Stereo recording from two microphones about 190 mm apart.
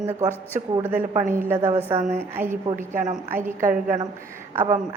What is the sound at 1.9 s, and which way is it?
Speech, 35° right (ahead or behind).